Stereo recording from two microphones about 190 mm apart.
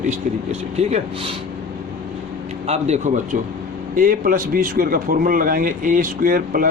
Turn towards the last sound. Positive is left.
turn(degrees=-45)  # may be behind; listen again after turning